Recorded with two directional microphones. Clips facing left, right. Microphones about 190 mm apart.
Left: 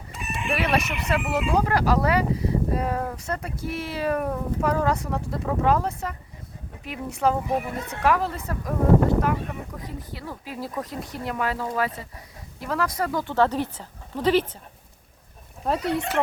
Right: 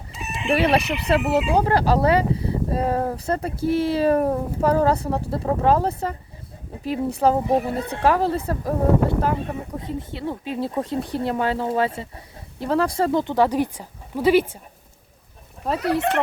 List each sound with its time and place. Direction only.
0.1 s chicken: 55° left (ahead or behind)
0.5 s speech: 30° right (ahead or behind)
0.8 s speech: 60° right (ahead or behind)
1.1 s speech: 30° right (ahead or behind); by 14.4 s 10° right (ahead or behind)